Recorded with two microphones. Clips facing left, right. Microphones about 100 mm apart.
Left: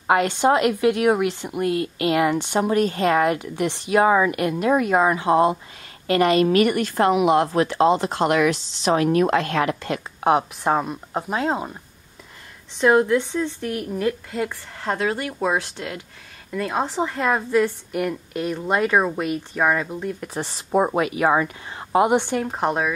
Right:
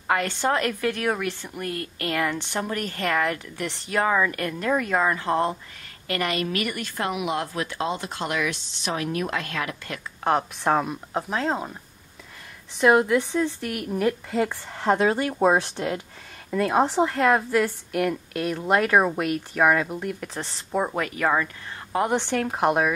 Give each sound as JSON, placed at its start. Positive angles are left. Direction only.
{"t": 0.0, "sound": "a woman's voice", "side_deg": 20}
{"t": 6.0, "sound": "a woman's voice", "side_deg": 25}
{"t": 10.2, "sound": "speech", "side_deg": 10}
{"t": 12.7, "sound": "a woman's voice", "side_deg": -5}
{"t": 14.3, "sound": "speech", "side_deg": -15}
{"t": 16.5, "sound": "a woman's voice", "side_deg": -5}
{"t": 20.3, "sound": "speech", "side_deg": 20}
{"t": 22.5, "sound": "a woman's voice", "side_deg": -5}